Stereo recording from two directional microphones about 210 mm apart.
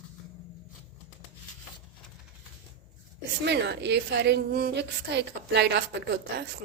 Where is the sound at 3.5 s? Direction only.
55° right (ahead or behind).